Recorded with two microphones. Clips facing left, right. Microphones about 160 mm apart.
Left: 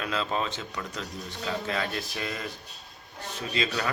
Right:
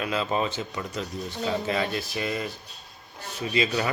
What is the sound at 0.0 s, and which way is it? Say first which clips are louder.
Speech: right 3 dB; 10° right (ahead or behind).